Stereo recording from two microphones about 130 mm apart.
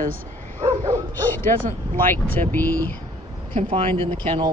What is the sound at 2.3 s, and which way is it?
Speech, 15° left (ahead or behind).